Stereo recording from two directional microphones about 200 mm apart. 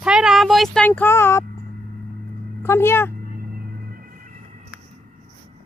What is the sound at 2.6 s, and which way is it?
Speech, 10° left (ahead or behind).